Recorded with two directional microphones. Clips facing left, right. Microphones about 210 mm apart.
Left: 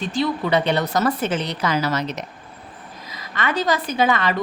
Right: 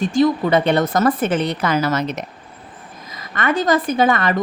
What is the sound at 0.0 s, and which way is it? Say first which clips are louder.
A woman's voice: right 6 dB; 50° right (ahead or behind).